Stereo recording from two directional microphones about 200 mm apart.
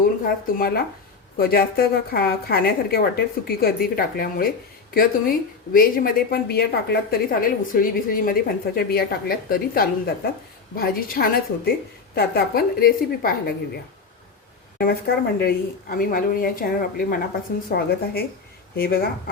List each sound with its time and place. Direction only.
0.3 s a woman's voice: 50° left (ahead or behind)
14.8 s a woman's voice: 50° left (ahead or behind)